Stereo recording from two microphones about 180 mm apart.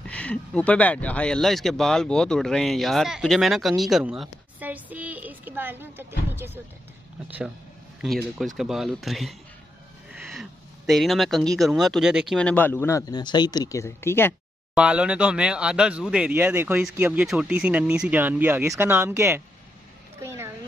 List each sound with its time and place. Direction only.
0.0 s speech: 5° left (ahead or behind); by 6.6 s 10° right (ahead or behind)
8.0 s speech: centre (ahead or behind)
10.3 s speech: centre (ahead or behind)
12.4 s speech: 10° left (ahead or behind)
14.8 s speech: 5° right (ahead or behind)
20.2 s a sound: 15° right (ahead or behind)